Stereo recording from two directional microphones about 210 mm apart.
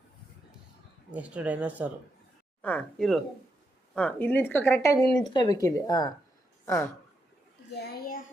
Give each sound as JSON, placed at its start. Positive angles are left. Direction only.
{"t": 1.1, "sound": "speech", "side_deg": -5}
{"t": 2.6, "sound": "a woman's voice", "side_deg": 5}
{"t": 7.8, "sound": "a sound", "side_deg": 45}